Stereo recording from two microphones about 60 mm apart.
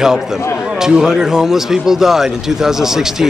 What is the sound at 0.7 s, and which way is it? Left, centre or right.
Speech, centre.